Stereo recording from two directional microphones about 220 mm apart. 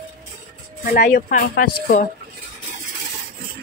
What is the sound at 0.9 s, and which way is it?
Speech, 40° left (ahead or behind).